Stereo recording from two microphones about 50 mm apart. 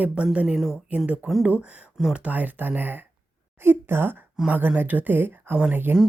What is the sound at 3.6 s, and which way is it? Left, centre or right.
Speech, right.